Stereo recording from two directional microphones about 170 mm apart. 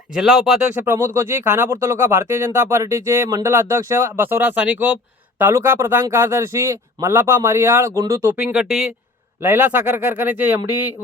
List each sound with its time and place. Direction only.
0.1 s speech: 5° right (ahead or behind)
0.9 s speech: 15° right (ahead or behind)